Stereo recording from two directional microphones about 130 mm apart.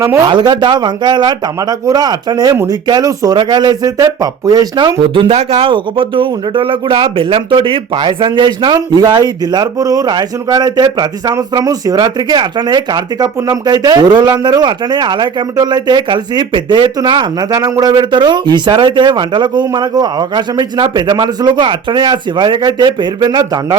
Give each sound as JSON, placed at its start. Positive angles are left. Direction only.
{"t": 0.0, "sound": "speech", "side_deg": -25}
{"t": 0.3, "sound": "a man's voice", "side_deg": -35}
{"t": 5.1, "sound": "a man's voice", "side_deg": -45}